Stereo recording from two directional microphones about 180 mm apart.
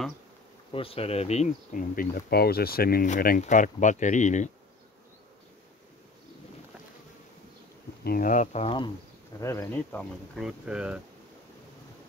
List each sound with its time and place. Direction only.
0.7 s speech: 30° left (ahead or behind)
8.0 s speech: 55° left (ahead or behind)
8.6 s speech: 25° left (ahead or behind)
9.4 s speech: 15° left (ahead or behind)
10.4 s speech: 5° right (ahead or behind)